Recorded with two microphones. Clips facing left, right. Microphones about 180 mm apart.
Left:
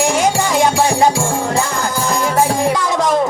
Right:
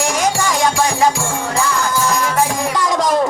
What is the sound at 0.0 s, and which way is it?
Music, 25° left (ahead or behind).